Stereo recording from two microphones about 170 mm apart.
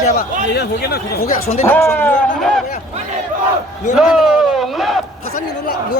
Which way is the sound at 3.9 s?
5° right (ahead or behind).